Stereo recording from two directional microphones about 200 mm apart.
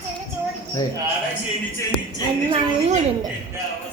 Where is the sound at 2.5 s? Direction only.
35° right (ahead or behind).